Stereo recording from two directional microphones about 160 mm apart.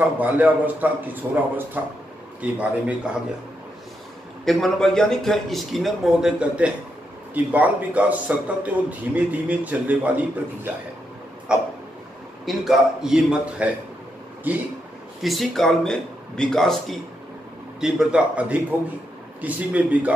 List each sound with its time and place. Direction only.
0.0 s a man's voice: 10° right (ahead or behind)
4.5 s a man's voice: centre (ahead or behind)
15.2 s a man's voice: centre (ahead or behind)